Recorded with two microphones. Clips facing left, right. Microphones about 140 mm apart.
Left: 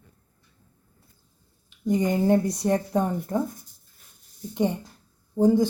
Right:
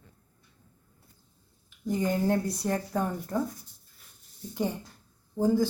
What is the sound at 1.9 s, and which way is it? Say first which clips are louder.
A woman's voice: left 5 dB; 20° left (ahead or behind).